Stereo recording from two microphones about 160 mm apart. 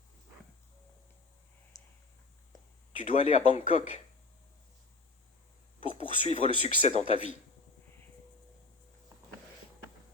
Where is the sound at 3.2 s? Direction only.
40° left (ahead or behind).